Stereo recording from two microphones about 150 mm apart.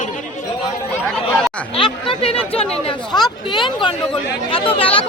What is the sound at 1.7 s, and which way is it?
Speech, 35° left (ahead or behind).